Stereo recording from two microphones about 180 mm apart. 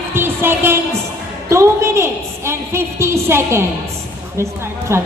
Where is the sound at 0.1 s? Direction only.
10° right (ahead or behind).